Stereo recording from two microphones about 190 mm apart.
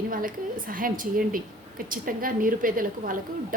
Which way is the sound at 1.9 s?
45° right (ahead or behind).